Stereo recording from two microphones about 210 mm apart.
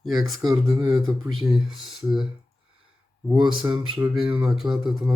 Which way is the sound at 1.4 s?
Centre (ahead or behind).